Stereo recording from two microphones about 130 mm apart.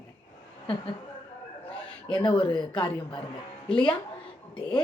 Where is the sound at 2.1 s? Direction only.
40° left (ahead or behind).